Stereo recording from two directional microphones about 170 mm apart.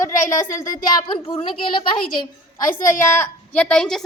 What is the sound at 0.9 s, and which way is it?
Speech, 30° left (ahead or behind).